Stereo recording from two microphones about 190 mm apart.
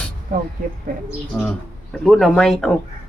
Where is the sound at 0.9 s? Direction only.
45° right (ahead or behind).